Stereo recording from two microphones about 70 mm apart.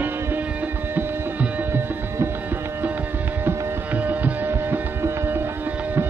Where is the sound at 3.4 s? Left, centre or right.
Right.